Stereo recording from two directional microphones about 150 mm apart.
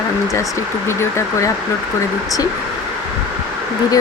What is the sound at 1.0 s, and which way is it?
Speech, 20° left (ahead or behind).